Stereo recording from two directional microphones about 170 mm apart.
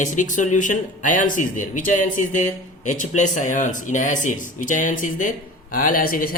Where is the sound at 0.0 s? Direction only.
45° left (ahead or behind).